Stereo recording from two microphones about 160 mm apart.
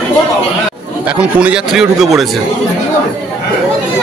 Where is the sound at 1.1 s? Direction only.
10° right (ahead or behind).